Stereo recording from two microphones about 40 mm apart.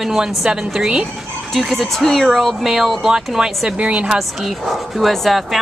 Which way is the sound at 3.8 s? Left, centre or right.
Right.